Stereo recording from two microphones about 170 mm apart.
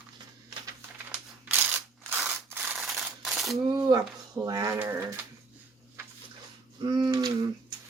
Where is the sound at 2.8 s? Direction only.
Centre (ahead or behind).